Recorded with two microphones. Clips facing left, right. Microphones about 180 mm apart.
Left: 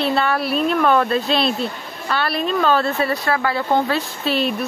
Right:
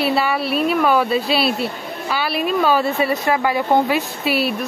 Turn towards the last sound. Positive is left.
turn(degrees=-10)  # may be behind; listen again after turning